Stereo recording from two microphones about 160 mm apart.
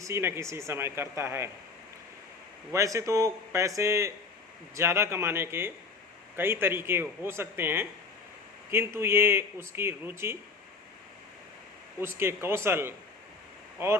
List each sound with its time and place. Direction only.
0.0 s speech: 15° right (ahead or behind)
2.7 s a man's voice: 20° right (ahead or behind)
11.9 s speech: 15° right (ahead or behind)